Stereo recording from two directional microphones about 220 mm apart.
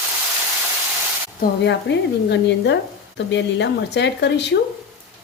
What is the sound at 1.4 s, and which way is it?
A woman's voice, 50° left (ahead or behind).